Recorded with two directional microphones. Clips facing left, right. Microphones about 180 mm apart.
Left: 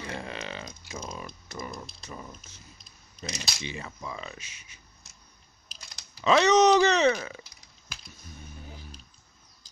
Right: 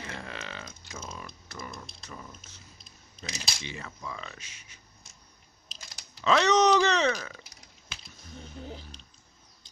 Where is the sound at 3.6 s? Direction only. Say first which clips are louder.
Left 3 dB; 15° left (ahead or behind).